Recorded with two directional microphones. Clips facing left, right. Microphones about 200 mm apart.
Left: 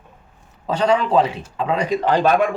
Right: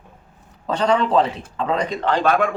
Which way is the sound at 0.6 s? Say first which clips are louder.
Left 1 dB; 5° left (ahead or behind).